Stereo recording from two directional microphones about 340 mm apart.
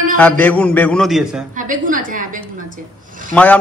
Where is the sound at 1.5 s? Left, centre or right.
Right.